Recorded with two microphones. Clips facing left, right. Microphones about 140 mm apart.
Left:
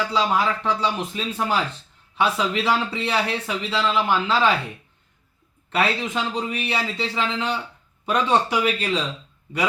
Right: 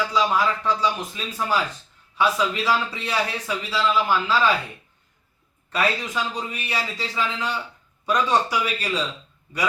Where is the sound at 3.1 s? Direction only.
25° left (ahead or behind).